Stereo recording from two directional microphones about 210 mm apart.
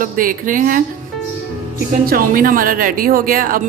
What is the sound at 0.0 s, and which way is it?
Speech, 40° right (ahead or behind).